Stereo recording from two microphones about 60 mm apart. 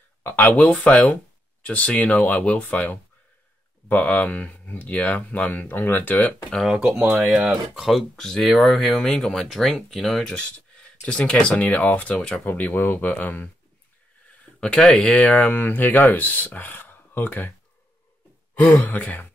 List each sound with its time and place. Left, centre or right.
0.2 s speech: left
6.7 s speech: centre
7.1 s speech: centre; by 13.5 s left
14.6 s speech: centre